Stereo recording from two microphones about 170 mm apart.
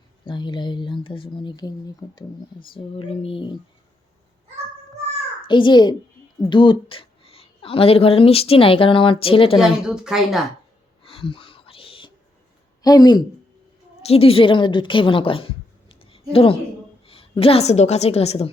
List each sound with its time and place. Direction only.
0.3 s speech: 25° left (ahead or behind)
2.7 s a sound: 35° left (ahead or behind)
5.5 s a woman's voice: 30° left (ahead or behind)
9.2 s a sound: 30° left (ahead or behind)
9.6 s a woman's voice: 5° right (ahead or behind)
11.1 s whispering: 30° left (ahead or behind)
12.8 s speech: 20° left (ahead or behind)
14.0 s a woman's voice: 35° left (ahead or behind)